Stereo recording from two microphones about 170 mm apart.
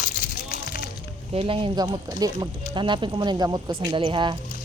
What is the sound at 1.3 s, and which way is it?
Speech, 35° right (ahead or behind).